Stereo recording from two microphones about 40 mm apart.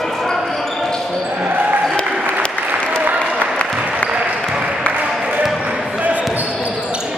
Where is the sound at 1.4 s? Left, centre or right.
Right.